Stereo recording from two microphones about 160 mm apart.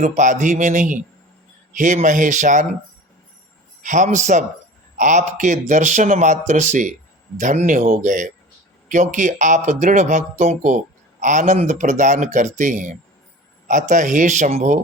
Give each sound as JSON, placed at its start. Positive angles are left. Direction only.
{"t": 0.0, "sound": "a man's voice", "side_deg": -50}
{"t": 3.8, "sound": "a man's voice", "side_deg": -50}